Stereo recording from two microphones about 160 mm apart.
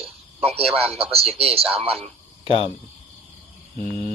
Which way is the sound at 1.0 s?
40° right (ahead or behind).